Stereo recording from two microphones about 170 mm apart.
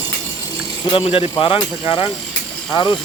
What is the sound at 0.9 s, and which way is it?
Speech, 35° left (ahead or behind).